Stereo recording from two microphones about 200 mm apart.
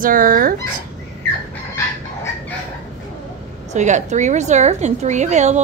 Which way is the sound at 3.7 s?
35° right (ahead or behind).